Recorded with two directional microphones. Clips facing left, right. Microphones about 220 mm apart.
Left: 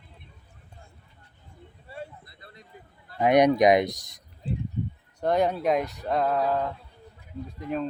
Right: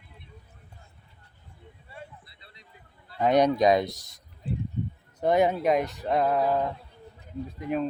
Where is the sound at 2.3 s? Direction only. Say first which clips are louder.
Left 6 dB; 50° left (ahead or behind).